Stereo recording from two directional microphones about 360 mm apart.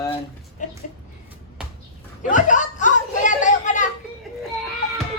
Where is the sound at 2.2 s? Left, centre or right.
Left.